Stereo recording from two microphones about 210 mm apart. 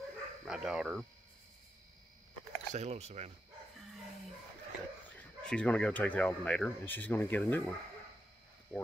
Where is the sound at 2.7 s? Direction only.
30° right (ahead or behind).